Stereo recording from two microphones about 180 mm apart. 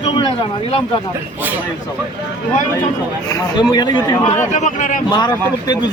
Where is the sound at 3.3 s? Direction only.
25° left (ahead or behind).